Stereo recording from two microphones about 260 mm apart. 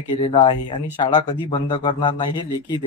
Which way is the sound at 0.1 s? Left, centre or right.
Centre.